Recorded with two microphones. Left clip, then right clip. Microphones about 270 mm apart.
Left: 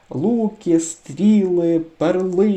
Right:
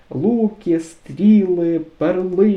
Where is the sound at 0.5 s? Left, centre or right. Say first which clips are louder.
Left 2 dB; centre.